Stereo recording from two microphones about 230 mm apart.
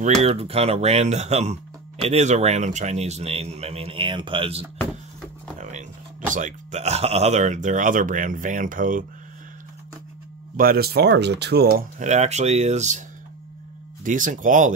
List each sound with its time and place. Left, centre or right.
0.0 s speech: right
10.5 s speech: right
14.0 s speech: right